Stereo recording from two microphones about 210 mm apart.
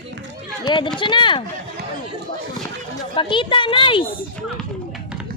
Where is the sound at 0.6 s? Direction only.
20° left (ahead or behind).